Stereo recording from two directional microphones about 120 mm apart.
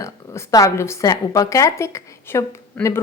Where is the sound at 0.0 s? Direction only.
25° left (ahead or behind).